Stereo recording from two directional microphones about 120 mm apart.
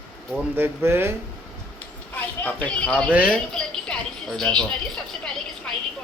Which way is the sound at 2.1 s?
15° left (ahead or behind).